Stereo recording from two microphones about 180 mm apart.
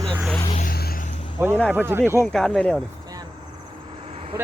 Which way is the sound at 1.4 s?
15° right (ahead or behind).